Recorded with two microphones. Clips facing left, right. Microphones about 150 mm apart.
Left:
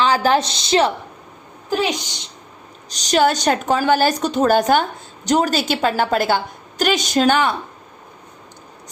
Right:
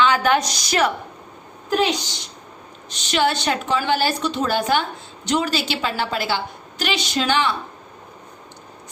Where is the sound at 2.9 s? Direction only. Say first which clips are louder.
Left 4 dB; 40° left (ahead or behind).